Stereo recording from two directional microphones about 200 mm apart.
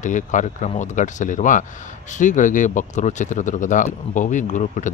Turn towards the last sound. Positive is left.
turn(degrees=35)  # may be behind; listen again after turning